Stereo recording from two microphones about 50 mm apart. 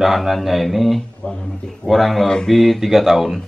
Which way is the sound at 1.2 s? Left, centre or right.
Left.